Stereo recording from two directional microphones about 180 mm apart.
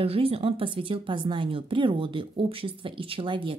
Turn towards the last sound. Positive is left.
turn(degrees=-30)  # may be behind; listen again after turning